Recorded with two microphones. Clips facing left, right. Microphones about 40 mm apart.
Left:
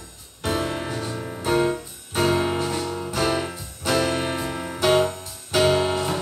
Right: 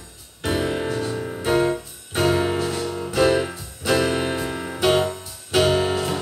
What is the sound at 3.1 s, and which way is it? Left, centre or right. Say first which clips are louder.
Music: right 6 dB; centre.